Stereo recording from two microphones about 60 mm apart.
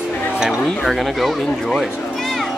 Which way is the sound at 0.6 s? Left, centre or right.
Centre.